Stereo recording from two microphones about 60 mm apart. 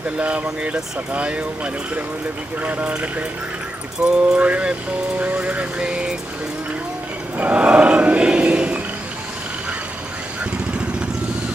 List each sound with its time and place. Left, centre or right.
0.2 s speech: centre
4.0 s speech: centre
4.4 s speech: right
7.3 s choir: right